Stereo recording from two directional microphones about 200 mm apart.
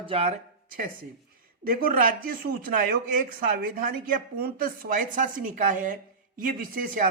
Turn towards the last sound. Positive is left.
turn(degrees=-45)  # may be behind; listen again after turning